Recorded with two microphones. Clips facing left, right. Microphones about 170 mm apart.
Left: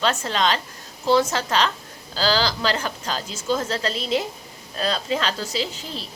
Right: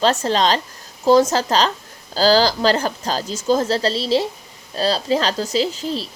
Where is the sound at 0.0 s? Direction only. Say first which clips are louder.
Right 5 dB; 35° right (ahead or behind).